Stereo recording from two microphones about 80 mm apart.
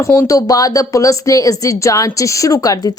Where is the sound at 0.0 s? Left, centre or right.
Left.